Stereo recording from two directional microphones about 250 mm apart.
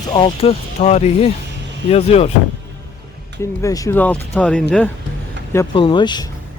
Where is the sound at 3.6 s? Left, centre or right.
Centre.